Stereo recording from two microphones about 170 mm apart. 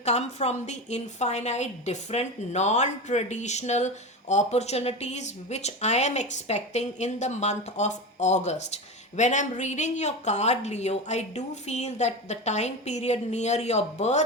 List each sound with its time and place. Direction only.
0.0 s a woman's voice: 40° left (ahead or behind)